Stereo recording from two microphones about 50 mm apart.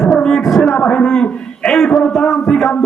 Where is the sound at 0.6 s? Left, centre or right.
Centre.